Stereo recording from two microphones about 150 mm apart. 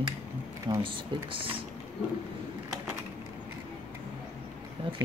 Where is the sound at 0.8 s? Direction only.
35° right (ahead or behind).